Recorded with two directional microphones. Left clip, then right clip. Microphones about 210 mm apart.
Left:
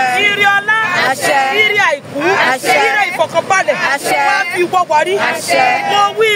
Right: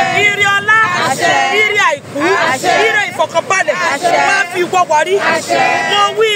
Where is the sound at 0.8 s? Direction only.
45° right (ahead or behind).